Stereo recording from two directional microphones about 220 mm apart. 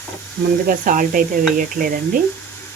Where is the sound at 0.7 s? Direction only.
40° right (ahead or behind).